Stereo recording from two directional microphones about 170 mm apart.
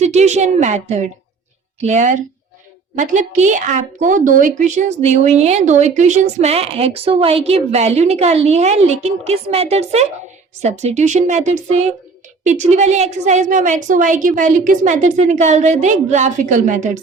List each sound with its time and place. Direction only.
0.0 s a woman's voice: 40° right (ahead or behind)